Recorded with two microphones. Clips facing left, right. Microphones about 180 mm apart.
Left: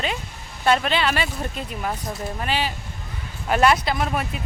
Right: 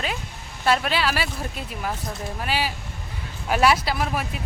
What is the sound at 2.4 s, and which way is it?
Speech, 10° right (ahead or behind).